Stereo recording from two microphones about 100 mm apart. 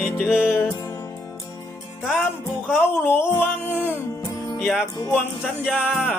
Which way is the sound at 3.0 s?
20° left (ahead or behind).